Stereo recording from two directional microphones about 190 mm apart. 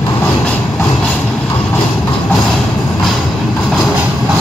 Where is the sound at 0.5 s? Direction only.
10° left (ahead or behind).